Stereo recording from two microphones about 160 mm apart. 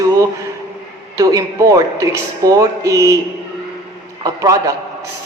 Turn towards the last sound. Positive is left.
turn(degrees=-20)  # may be behind; listen again after turning